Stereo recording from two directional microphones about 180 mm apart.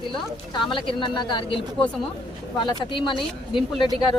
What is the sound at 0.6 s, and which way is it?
Speech, 30° left (ahead or behind).